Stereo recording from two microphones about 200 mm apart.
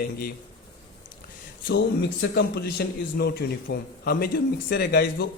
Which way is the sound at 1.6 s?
55° left (ahead or behind).